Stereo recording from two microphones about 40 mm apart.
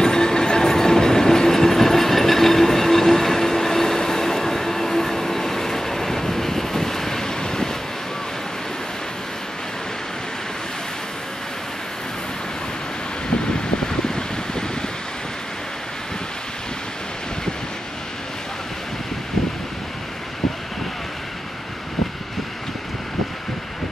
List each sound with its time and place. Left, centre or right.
0.0 s train: centre
13.8 s mechanical fan: centre